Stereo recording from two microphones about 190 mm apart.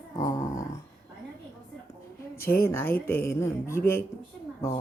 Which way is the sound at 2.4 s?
15° left (ahead or behind).